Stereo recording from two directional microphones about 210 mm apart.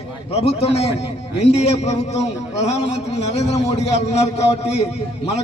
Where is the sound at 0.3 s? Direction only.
30° left (ahead or behind).